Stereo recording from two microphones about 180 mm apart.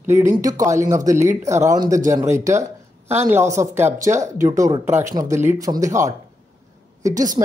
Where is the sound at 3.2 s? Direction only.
15° right (ahead or behind).